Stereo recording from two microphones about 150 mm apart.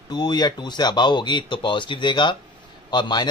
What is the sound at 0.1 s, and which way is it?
Speech, 25° left (ahead or behind).